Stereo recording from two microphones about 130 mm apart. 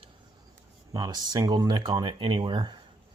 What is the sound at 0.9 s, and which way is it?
Speech, 30° right (ahead or behind).